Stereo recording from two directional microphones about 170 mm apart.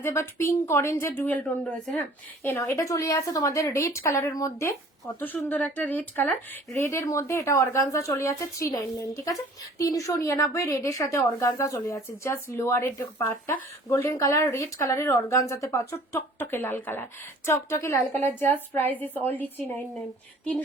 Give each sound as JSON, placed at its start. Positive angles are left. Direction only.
{"t": 0.0, "sound": "a woman's voice", "side_deg": 15}